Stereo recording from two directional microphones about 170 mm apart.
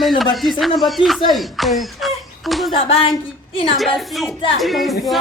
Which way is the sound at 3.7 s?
Centre (ahead or behind).